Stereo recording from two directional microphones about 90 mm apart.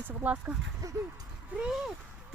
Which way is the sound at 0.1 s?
20° right (ahead or behind).